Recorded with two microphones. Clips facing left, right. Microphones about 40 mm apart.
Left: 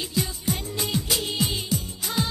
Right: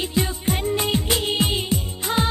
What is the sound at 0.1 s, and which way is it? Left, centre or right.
Music, right.